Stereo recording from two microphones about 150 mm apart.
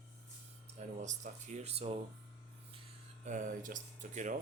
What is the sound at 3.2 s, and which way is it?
Speech, 60° right (ahead or behind).